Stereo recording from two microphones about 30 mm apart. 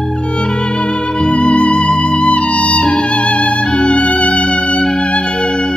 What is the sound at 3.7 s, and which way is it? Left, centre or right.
Music, left.